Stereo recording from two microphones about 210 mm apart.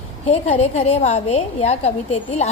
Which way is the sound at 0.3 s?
30° left (ahead or behind).